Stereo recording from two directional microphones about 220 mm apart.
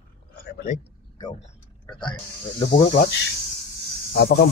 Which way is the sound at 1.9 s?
20° left (ahead or behind).